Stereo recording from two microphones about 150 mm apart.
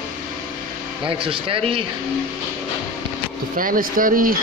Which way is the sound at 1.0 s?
35° right (ahead or behind).